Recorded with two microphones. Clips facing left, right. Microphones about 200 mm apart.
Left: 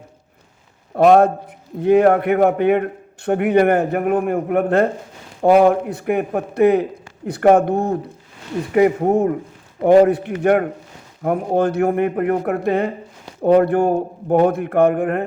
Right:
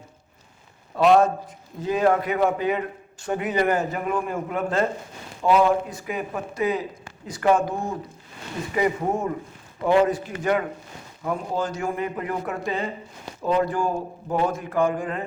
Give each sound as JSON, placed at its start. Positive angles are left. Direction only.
{"t": 0.9, "sound": "a man's voice", "side_deg": 50}